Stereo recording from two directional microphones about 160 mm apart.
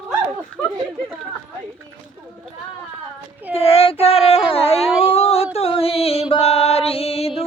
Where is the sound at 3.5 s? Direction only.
35° left (ahead or behind).